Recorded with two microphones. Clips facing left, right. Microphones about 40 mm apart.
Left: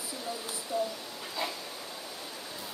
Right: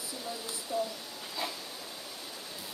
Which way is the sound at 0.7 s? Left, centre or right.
Centre.